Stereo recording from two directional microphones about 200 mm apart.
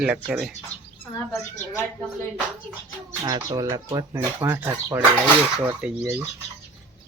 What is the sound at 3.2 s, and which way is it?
Speech, 15° right (ahead or behind).